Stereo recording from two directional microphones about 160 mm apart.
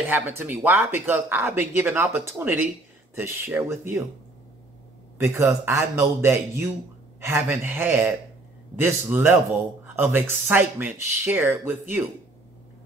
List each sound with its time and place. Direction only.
0.1 s speech: 10° right (ahead or behind)
5.2 s speech: 15° right (ahead or behind)